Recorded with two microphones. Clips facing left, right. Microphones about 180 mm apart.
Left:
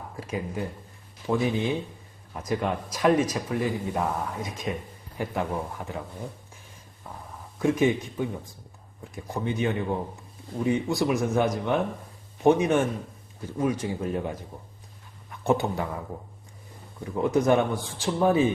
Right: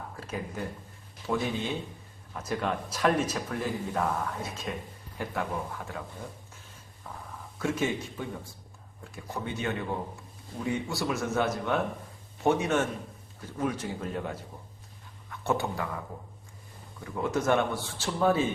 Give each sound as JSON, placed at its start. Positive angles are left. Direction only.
{"t": 0.2, "sound": "speech", "side_deg": 10}
{"t": 7.6, "sound": "speech", "side_deg": 15}
{"t": 17.0, "sound": "speech", "side_deg": 20}